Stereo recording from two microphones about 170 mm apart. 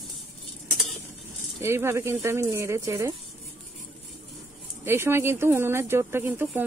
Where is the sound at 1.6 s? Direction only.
15° right (ahead or behind).